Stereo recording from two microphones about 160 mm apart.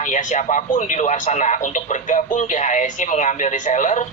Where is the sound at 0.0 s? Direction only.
50° left (ahead or behind).